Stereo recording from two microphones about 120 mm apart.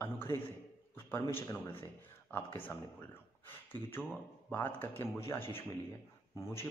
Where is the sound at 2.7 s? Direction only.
20° left (ahead or behind).